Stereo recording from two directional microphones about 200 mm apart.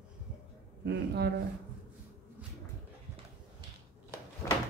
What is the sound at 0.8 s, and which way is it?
Speech, 55° right (ahead or behind).